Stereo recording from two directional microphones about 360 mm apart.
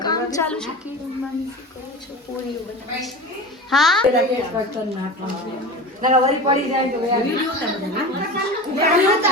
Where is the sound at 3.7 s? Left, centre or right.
Centre.